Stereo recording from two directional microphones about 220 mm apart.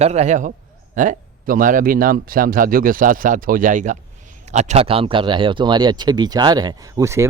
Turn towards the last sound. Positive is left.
turn(degrees=-10)  # may be behind; listen again after turning